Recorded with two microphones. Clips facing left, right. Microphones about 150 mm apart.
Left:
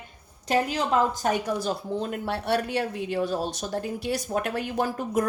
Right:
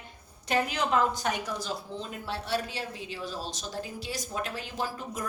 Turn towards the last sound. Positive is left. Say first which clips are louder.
# left 8 dB
turn(degrees=60)  # may be behind; listen again after turning